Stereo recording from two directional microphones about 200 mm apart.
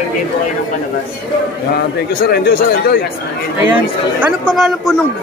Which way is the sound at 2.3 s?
55° left (ahead or behind).